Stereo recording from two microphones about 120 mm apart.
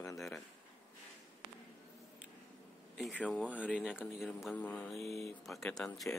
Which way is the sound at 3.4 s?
10° right (ahead or behind).